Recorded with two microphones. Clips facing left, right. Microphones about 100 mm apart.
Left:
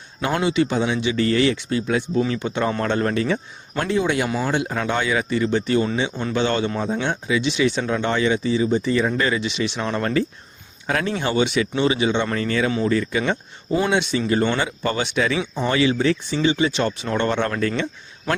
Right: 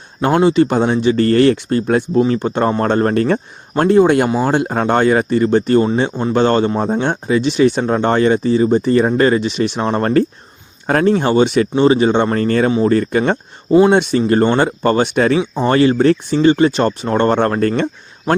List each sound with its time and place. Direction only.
0.2 s a man's voice: 35° right (ahead or behind)
15.4 s speech: 35° right (ahead or behind)